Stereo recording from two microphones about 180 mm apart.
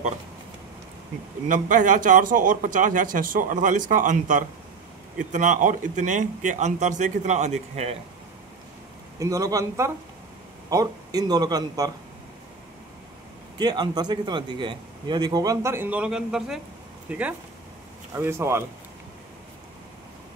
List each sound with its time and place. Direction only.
1.5 s speech: 45° right (ahead or behind)
9.2 s a man's voice: 20° right (ahead or behind)
13.6 s a man's voice: 25° right (ahead or behind)